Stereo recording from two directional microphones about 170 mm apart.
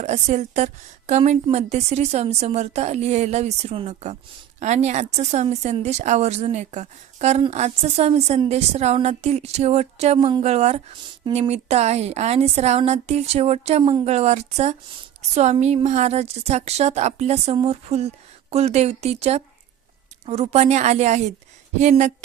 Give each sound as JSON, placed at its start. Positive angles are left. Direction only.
{"t": 0.0, "sound": "a woman's voice", "side_deg": -40}
{"t": 10.2, "sound": "a woman's voice", "side_deg": -25}
{"t": 10.4, "sound": "a woman's voice", "side_deg": -40}